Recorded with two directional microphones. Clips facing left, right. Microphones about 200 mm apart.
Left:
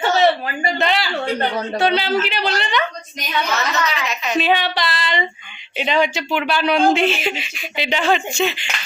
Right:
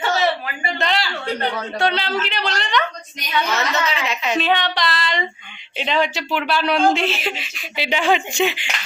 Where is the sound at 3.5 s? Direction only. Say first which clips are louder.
Even; 25° right (ahead or behind).